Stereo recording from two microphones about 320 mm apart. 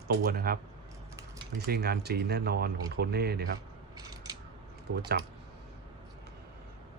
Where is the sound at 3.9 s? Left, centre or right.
Centre.